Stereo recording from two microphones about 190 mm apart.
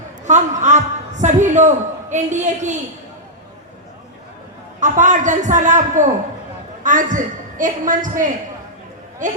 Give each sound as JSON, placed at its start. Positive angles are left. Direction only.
{"t": 0.3, "sound": "a man's voice", "side_deg": -40}
{"t": 4.8, "sound": "a man's voice", "side_deg": -40}